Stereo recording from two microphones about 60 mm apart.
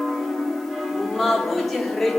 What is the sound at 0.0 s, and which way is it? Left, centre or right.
Music, centre.